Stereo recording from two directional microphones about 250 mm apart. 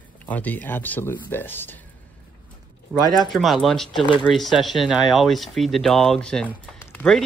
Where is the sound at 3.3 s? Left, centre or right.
Centre.